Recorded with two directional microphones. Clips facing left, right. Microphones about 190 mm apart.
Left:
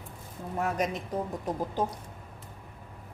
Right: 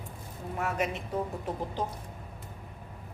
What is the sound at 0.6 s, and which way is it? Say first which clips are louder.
Speech: left 1 dB; 40° left (ahead or behind).